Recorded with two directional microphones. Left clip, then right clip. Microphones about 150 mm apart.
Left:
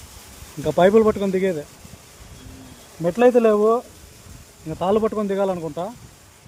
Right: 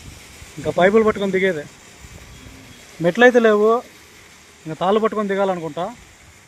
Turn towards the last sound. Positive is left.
turn(degrees=0)  # may be behind; listen again after turning